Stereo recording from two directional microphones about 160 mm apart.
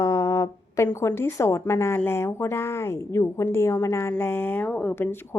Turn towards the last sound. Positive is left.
turn(degrees=15)  # may be behind; listen again after turning